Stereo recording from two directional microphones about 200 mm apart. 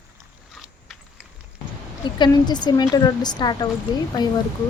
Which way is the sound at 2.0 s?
20° left (ahead or behind).